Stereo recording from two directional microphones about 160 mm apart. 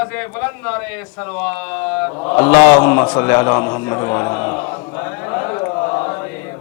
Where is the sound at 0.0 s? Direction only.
15° left (ahead or behind).